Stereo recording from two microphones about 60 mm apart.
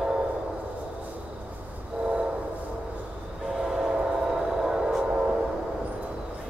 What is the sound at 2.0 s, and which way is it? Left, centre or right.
Train, centre.